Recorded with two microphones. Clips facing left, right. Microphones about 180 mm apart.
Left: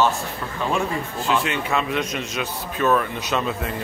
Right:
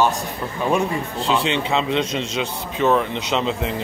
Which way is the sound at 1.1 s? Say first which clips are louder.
Right 2 dB; 30° right (ahead or behind).